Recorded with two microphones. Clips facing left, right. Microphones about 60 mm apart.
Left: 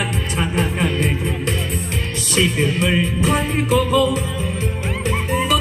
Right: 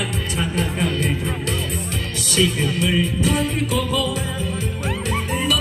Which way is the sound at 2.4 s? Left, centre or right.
Left.